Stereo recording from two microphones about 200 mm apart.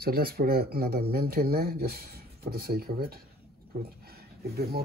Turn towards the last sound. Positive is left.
turn(degrees=-50)  # may be behind; listen again after turning